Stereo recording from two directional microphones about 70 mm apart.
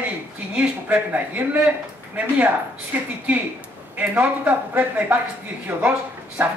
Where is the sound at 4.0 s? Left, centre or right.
Right.